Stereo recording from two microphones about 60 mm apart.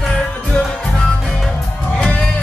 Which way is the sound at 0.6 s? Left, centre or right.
Centre.